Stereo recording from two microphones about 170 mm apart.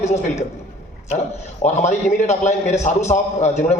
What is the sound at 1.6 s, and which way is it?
A man's voice, 40° left (ahead or behind).